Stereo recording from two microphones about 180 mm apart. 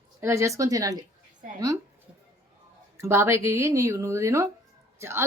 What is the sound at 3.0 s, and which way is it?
A woman's voice, 15° right (ahead or behind).